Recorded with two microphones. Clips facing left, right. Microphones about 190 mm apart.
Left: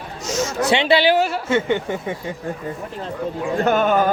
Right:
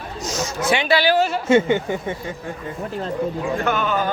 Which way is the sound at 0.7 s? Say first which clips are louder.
Left 2 dB; 25° left (ahead or behind).